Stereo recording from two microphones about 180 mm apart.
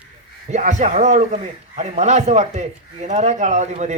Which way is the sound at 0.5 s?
40° right (ahead or behind).